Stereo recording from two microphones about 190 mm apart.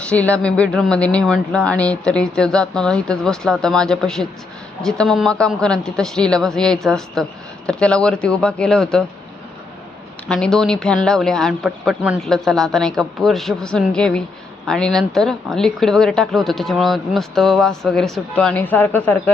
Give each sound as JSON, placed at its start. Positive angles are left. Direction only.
{"t": 0.0, "sound": "speech", "side_deg": 5}
{"t": 10.2, "sound": "speech", "side_deg": 5}